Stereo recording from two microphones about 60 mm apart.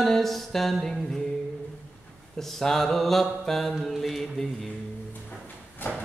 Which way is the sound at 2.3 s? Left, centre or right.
Centre.